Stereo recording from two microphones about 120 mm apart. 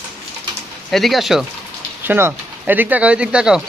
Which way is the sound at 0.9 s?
Centre (ahead or behind).